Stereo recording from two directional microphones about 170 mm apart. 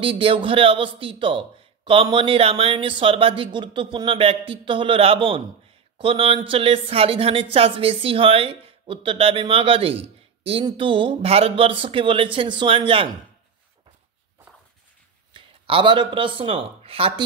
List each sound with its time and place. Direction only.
0.0 s speech: 30° right (ahead or behind)
15.3 s speech: 30° right (ahead or behind)